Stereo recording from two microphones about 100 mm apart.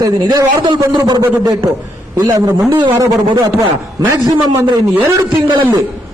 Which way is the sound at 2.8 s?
50° right (ahead or behind).